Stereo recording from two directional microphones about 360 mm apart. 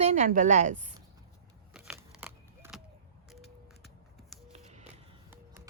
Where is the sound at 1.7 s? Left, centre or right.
Centre.